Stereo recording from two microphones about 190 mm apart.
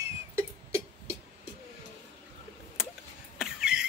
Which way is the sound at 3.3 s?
5° right (ahead or behind).